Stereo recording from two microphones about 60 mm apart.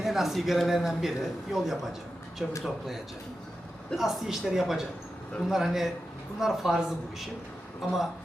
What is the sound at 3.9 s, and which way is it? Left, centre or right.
Speech, centre.